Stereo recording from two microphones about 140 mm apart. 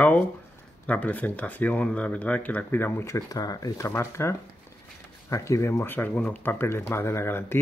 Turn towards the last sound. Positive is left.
turn(degrees=20)  # may be behind; listen again after turning